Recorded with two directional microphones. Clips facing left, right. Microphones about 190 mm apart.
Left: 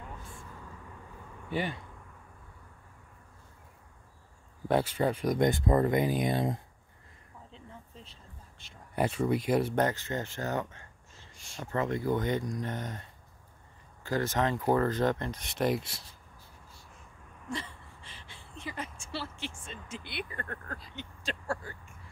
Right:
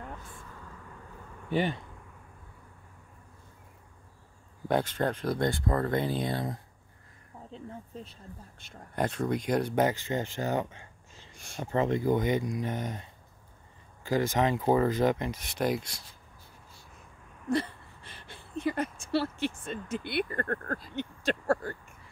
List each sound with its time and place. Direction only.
1.5 s speech: 25° right (ahead or behind)
4.6 s speech: 5° left (ahead or behind); by 6.6 s 20° left (ahead or behind)
7.5 s a sound: 45° right (ahead or behind)
8.5 s speech: 50° right (ahead or behind)
8.9 s speech: 5° left (ahead or behind)
9.8 s speech: 10° right (ahead or behind)
11.3 s speech: 55° right (ahead or behind)
11.6 s speech: 20° right (ahead or behind)
14.0 s speech: 10° right (ahead or behind)
15.4 s speech: centre (ahead or behind)
17.6 s a sound: 55° right (ahead or behind)
19.6 s speech: 55° right (ahead or behind)